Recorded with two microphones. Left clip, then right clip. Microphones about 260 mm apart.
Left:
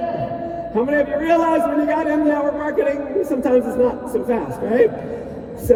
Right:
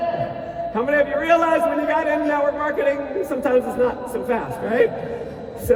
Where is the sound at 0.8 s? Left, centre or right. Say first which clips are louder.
Left 1 dB; right.